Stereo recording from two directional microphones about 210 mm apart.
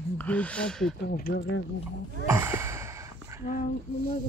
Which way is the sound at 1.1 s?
50° left (ahead or behind).